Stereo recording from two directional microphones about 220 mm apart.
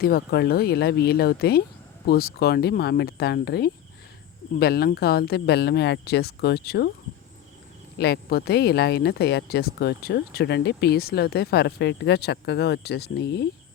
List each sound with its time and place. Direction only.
0.0 s speech: 45° left (ahead or behind)
7.9 s speech: 50° left (ahead or behind)